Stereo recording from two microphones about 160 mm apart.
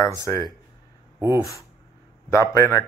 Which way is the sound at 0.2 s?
20° left (ahead or behind).